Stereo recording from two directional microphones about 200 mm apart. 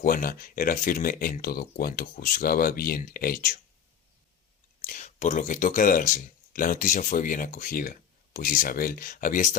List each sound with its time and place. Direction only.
0.0 s speech: 45° left (ahead or behind)
4.8 s speech: 40° left (ahead or behind)